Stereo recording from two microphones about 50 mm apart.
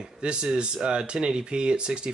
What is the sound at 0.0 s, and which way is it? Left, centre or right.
Speech, centre.